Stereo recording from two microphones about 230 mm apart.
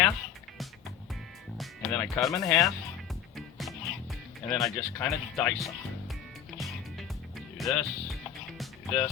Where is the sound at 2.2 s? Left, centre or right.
Centre.